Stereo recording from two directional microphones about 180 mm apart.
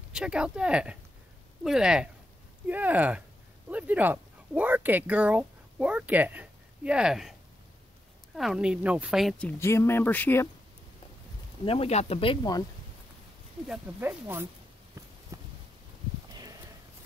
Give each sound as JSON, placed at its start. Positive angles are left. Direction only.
{"t": 0.1, "sound": "speech", "side_deg": -5}
{"t": 8.4, "sound": "speech", "side_deg": -5}
{"t": 9.6, "sound": "speech", "side_deg": 15}
{"t": 11.6, "sound": "speech", "side_deg": 30}
{"t": 13.7, "sound": "speech", "side_deg": -10}
{"t": 15.3, "sound": "a sound", "side_deg": -20}